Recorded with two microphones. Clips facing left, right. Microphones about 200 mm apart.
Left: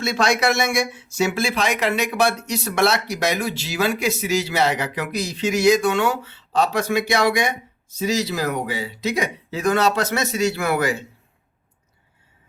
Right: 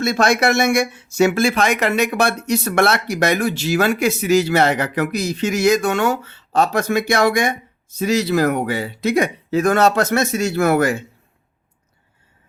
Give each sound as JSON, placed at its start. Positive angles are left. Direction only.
{"t": 0.0, "sound": "speech", "side_deg": -50}